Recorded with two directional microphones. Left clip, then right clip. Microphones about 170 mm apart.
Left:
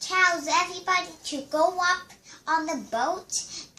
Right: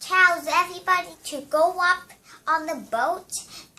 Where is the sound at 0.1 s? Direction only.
15° right (ahead or behind).